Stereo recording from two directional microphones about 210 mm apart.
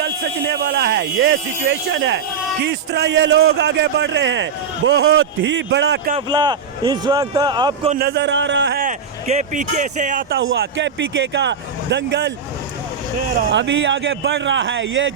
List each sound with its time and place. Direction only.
0.0 s a man's voice: 50° right (ahead or behind)
6.1 s speech: 20° right (ahead or behind)
7.9 s a man's voice: 50° right (ahead or behind)
13.5 s a man's voice: 60° right (ahead or behind)